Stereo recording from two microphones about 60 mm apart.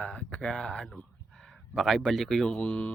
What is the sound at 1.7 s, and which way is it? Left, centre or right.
Speech, centre.